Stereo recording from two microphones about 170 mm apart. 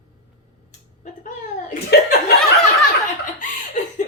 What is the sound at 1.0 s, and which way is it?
Speech, 45° left (ahead or behind).